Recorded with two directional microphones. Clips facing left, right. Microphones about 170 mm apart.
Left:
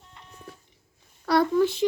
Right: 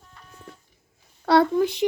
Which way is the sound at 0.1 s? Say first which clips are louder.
Even; 20° left (ahead or behind).